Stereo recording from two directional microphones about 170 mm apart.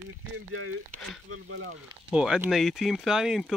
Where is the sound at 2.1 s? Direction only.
5° right (ahead or behind).